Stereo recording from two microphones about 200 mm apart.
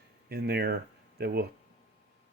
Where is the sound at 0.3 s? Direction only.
50° right (ahead or behind).